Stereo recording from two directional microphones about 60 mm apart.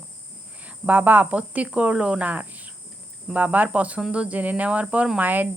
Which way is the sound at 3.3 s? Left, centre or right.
Right.